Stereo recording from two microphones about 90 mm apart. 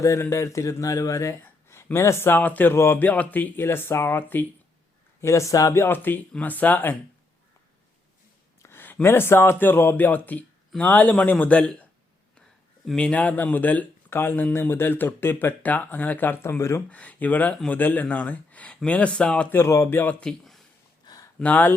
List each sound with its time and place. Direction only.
0.0 s speech: 30° left (ahead or behind)
2.7 s speech: 30° left (ahead or behind)
5.2 s speech: 35° left (ahead or behind)
8.6 s speech: 25° left (ahead or behind)
13.0 s speech: 15° left (ahead or behind); by 16.8 s 30° left (ahead or behind)
16.9 s speech: 15° left (ahead or behind)
19.5 s speech: 35° left (ahead or behind)
20.0 s speech: 15° left (ahead or behind)
21.0 s a sound: 50° left (ahead or behind)
21.3 s speech: 15° left (ahead or behind)